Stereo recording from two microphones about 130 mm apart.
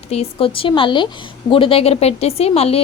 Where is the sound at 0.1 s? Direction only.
50° left (ahead or behind).